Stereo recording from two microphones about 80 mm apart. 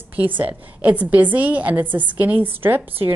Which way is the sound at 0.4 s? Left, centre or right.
Centre.